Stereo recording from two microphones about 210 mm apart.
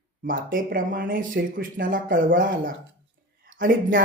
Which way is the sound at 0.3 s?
40° right (ahead or behind).